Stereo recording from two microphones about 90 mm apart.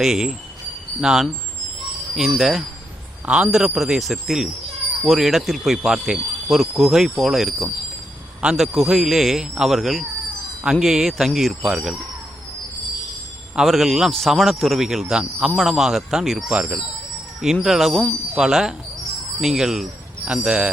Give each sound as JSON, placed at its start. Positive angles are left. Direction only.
{"t": 0.0, "sound": "speech", "side_deg": -5}
{"t": 3.2, "sound": "speech", "side_deg": -10}
{"t": 3.5, "sound": "speech", "side_deg": 0}
{"t": 13.6, "sound": "a man's voice", "side_deg": 0}